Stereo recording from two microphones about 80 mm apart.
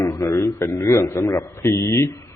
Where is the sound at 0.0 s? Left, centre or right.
Left.